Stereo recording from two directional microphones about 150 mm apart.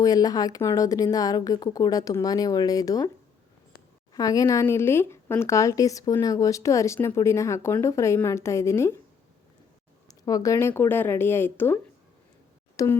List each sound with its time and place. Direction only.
0.0 s speech: 25° left (ahead or behind)
4.1 s speech: 25° left (ahead or behind)
10.1 s a woman's voice: 25° left (ahead or behind)
12.7 s a sound: 25° left (ahead or behind)